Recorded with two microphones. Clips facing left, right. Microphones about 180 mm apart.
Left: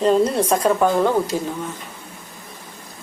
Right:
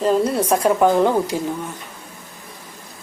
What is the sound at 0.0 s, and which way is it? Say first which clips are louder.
A woman's voice: left 1 dB; 5° right (ahead or behind).